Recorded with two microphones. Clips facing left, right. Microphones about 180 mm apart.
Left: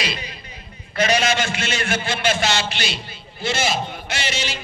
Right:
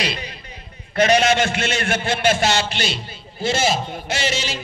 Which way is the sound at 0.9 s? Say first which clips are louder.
Right 4 dB; 60° right (ahead or behind).